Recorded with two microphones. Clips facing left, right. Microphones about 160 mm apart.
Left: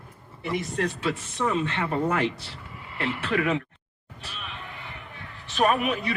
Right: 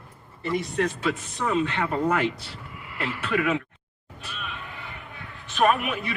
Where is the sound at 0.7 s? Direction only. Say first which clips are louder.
Right 2 dB; 30° left (ahead or behind).